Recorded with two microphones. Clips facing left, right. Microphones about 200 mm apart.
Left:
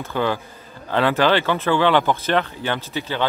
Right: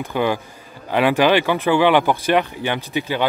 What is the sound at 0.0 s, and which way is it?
Speech, 15° right (ahead or behind).